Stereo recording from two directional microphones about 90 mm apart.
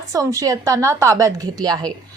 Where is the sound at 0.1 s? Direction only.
35° right (ahead or behind).